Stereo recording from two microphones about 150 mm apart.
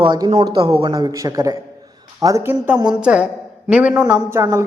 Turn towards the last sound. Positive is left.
turn(degrees=-20)  # may be behind; listen again after turning